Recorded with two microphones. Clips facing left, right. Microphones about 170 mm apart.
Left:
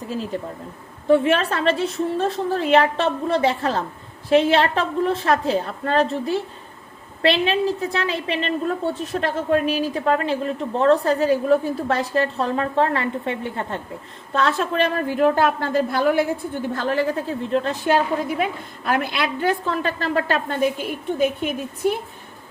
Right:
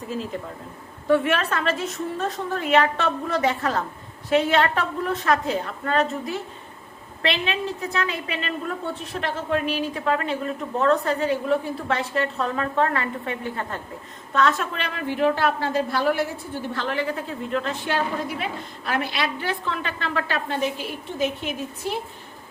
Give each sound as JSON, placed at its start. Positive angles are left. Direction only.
{"t": 1.0, "sound": "a woman's voice", "side_deg": 25}
{"t": 9.1, "sound": "a woman's voice", "side_deg": 40}